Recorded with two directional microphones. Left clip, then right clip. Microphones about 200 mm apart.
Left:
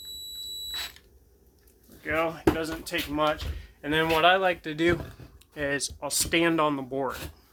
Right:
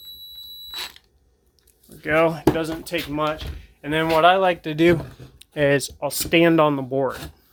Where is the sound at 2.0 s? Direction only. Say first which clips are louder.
Right 7 dB; 55° right (ahead or behind); by 3.0 s 35° right (ahead or behind).